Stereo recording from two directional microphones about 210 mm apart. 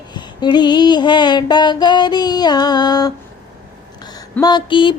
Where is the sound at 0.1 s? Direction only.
20° left (ahead or behind).